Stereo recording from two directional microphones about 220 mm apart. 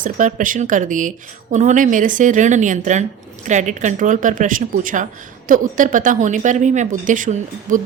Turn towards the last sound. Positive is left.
turn(degrees=-35)  # may be behind; listen again after turning